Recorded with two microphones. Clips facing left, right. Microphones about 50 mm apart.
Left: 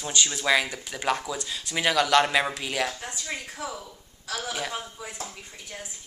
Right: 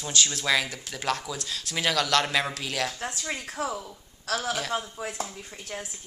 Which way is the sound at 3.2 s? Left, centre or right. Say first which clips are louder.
Right 3 dB; right.